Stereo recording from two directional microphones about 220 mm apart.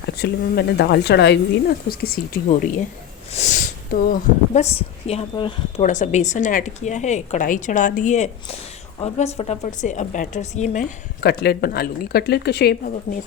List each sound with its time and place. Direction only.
0.2 s a woman's voice: 50° left (ahead or behind)